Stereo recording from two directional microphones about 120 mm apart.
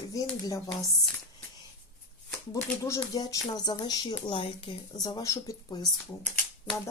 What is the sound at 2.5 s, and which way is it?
A woman's voice, 30° left (ahead or behind).